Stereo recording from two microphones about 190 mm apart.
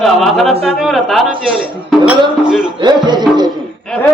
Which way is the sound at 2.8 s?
20° right (ahead or behind).